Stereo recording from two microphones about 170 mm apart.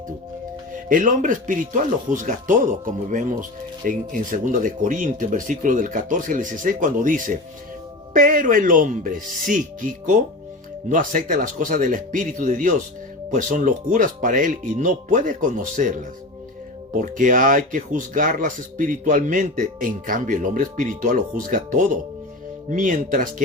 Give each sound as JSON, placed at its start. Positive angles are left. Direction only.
{"t": 0.9, "sound": "speech", "side_deg": -50}